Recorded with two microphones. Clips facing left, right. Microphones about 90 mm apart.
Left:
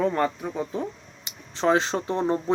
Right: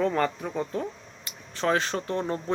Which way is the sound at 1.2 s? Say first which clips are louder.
Left 4 dB; 20° left (ahead or behind).